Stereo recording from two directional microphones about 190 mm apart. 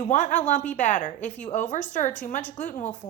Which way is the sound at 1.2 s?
10° left (ahead or behind).